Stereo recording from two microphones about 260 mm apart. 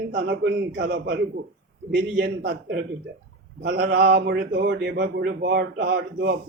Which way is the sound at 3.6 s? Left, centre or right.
Right.